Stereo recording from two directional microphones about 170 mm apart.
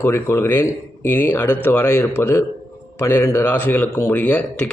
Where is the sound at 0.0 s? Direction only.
15° left (ahead or behind).